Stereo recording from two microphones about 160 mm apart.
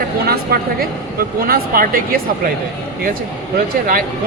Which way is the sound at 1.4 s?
65° right (ahead or behind).